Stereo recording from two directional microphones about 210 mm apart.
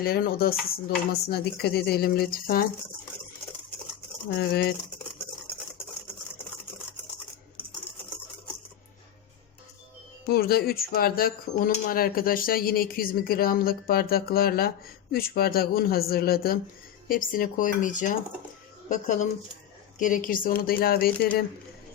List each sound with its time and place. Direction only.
0.0 s speech: 45° left (ahead or behind)
4.4 s speech: 50° left (ahead or behind)
10.2 s speech: 50° left (ahead or behind)